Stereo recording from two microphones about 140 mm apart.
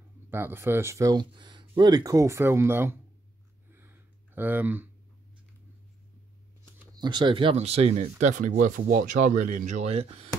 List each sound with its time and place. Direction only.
0.3 s speech: 15° right (ahead or behind)
3.7 s a sound: 15° right (ahead or behind)
6.6 s shuffling cards: 30° right (ahead or behind)
7.5 s speech: 50° right (ahead or behind)
8.2 s speech: 60° right (ahead or behind); by 10.3 s 45° right (ahead or behind)